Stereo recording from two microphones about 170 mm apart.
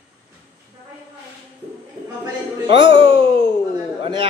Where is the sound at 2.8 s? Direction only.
30° right (ahead or behind).